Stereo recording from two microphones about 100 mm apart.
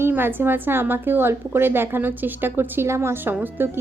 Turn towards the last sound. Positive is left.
turn(degrees=-20)  # may be behind; listen again after turning